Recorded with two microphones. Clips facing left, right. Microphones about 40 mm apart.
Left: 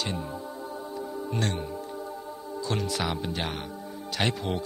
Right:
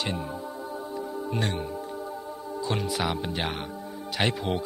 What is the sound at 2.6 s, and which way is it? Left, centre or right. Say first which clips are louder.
Speech: right 1 dB; centre.